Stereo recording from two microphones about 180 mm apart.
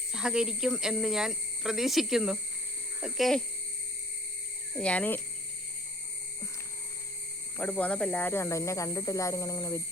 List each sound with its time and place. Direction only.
0.1 s speech: 5° right (ahead or behind)
4.7 s speech: 5° left (ahead or behind)
7.6 s speech: 10° left (ahead or behind)